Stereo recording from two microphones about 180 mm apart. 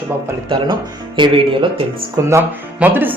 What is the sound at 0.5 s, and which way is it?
Speech, 25° right (ahead or behind).